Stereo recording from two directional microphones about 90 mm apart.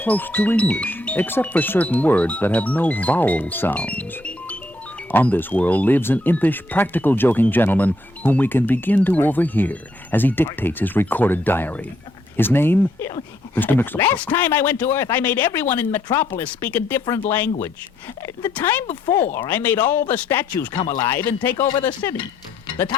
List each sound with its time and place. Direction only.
0.0 s speech: 20° left (ahead or behind)
20.8 s speech: 40° left (ahead or behind)
21.1 s speech: 25° left (ahead or behind)